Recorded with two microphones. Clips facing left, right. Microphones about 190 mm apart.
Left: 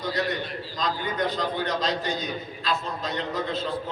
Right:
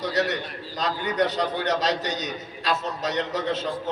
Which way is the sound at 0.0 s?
75° right (ahead or behind).